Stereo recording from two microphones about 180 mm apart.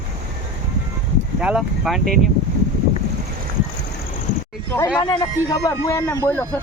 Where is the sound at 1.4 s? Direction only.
5° right (ahead or behind).